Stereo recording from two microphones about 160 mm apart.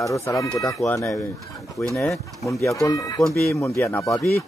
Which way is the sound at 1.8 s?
15° left (ahead or behind).